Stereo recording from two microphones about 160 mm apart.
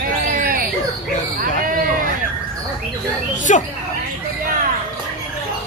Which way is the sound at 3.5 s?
45° left (ahead or behind).